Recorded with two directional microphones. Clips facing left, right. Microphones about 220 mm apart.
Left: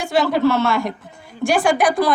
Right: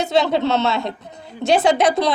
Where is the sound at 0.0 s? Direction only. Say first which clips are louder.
Left 1 dB; 20° right (ahead or behind).